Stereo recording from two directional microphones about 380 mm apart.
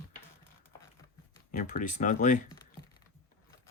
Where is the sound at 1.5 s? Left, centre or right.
Left.